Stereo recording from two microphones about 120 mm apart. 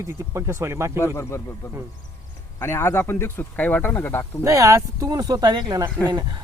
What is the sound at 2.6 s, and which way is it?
Speech, 20° left (ahead or behind).